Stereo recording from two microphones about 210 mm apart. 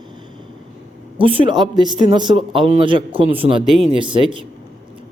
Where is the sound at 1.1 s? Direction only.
25° right (ahead or behind).